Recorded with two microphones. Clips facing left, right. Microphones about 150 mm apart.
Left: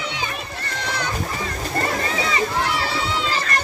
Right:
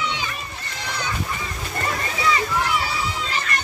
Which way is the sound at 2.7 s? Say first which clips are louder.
Left 1 dB; 80° left.